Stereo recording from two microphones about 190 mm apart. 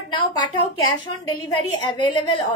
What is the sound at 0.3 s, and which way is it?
A woman's voice, 20° left (ahead or behind).